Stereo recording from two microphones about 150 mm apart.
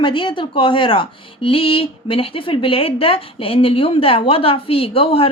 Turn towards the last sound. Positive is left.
turn(degrees=40)  # may be behind; listen again after turning